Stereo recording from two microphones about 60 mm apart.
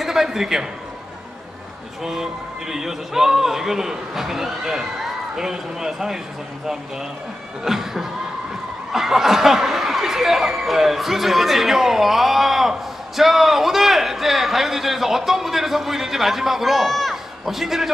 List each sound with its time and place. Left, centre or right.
0.0 s a man's voice: centre
2.7 s speech: centre
7.6 s speech: centre